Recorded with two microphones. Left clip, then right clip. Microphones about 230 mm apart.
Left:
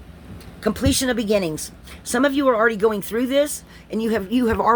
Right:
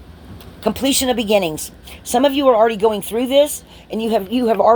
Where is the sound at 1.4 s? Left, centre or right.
Left.